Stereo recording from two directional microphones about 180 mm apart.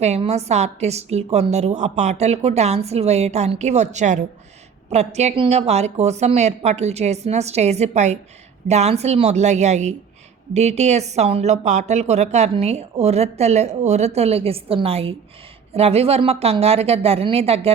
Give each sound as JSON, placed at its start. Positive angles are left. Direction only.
{"t": 0.0, "sound": "speech", "side_deg": -35}